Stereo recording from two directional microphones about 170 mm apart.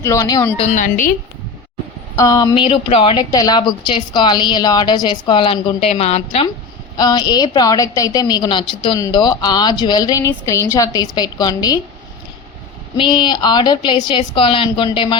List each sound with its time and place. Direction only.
0.0 s a woman's voice: 20° left (ahead or behind)
0.5 s a woman's voice: 40° left (ahead or behind)
2.1 s a woman's voice: 20° left (ahead or behind)
6.9 s a woman's voice: 25° left (ahead or behind)
13.0 s a woman's voice: 25° left (ahead or behind)